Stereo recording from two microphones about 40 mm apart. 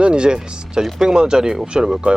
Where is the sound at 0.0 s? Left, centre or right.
Right.